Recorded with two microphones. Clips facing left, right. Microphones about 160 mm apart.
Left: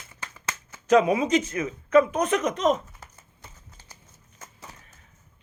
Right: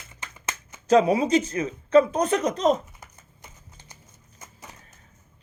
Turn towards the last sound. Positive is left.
turn(degrees=-20)  # may be behind; listen again after turning